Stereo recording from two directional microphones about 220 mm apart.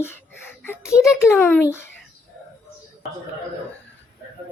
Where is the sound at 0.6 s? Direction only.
10° left (ahead or behind).